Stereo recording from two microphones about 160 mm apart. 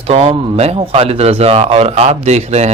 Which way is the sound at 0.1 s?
40° right (ahead or behind).